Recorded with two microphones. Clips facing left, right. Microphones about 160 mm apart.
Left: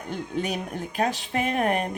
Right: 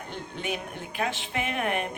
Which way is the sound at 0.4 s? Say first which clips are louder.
Left 3 dB; 40° left (ahead or behind).